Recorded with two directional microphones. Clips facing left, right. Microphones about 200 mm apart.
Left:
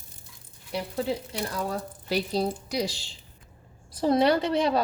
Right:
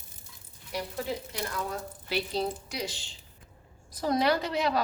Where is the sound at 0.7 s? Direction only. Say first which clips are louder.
Left 4 dB; 30° left (ahead or behind).